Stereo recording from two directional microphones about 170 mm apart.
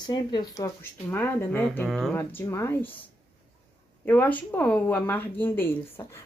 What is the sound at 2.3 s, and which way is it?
Speech, 15° left (ahead or behind).